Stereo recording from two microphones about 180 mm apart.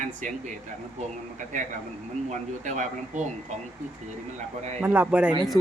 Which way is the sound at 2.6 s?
45° right (ahead or behind).